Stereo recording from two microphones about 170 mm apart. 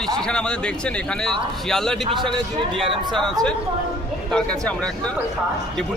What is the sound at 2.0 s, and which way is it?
A man's voice, 30° right (ahead or behind).